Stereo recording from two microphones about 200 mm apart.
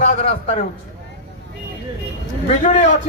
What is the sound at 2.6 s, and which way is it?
Speech, 35° left (ahead or behind).